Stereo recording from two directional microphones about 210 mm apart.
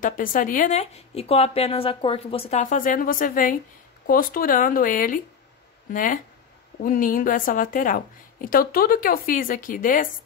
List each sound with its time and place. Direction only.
0.0 s a woman's voice: 40° left (ahead or behind)